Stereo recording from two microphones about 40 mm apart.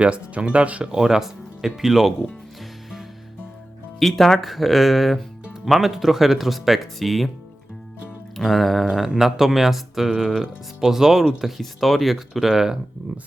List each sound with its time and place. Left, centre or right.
0.0 s speech: right
0.9 s speech: centre
4.0 s speech: centre
8.4 s speech: centre
9.1 s speech: centre